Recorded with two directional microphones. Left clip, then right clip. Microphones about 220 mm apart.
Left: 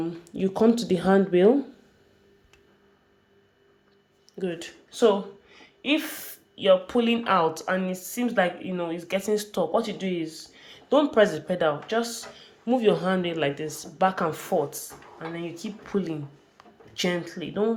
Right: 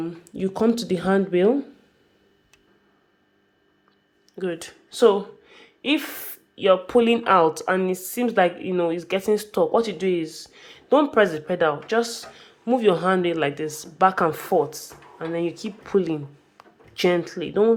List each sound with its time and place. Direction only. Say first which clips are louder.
0.0 s speech: even; 20° right (ahead or behind)
4.4 s speech: right 3 dB; 15° right (ahead or behind)